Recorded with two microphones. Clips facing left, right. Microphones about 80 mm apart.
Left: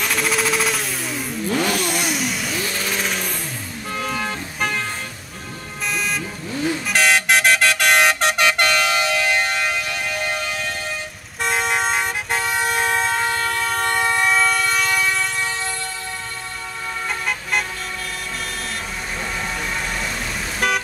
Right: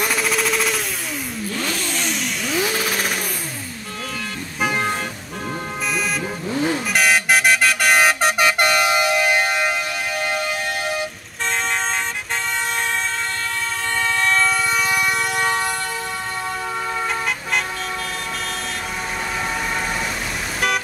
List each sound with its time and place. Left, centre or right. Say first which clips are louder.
0.0 s machine gun: even; centre
1.9 s vehicle: left 2 dB; centre
2.6 s vehicle: right 2 dB; centre
6.5 s vehicle: right 2 dB; right
6.9 s vehicle: left 1 dB; centre
11.5 s vehicle: left 3 dB; centre
15.3 s vehicle: right 5 dB; right